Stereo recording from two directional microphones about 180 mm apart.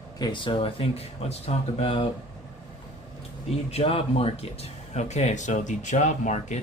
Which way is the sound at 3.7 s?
35° left (ahead or behind).